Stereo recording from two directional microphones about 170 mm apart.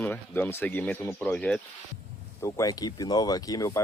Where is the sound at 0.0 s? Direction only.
10° left (ahead or behind).